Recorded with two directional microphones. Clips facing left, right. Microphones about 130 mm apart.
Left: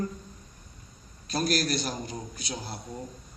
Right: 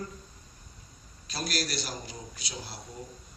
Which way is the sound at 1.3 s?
45° left (ahead or behind).